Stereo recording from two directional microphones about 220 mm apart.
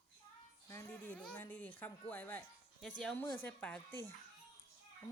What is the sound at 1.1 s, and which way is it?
Music, 5° left (ahead or behind).